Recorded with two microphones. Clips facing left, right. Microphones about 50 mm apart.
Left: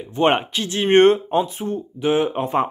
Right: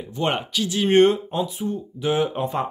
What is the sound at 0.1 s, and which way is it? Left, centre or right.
Speech, left.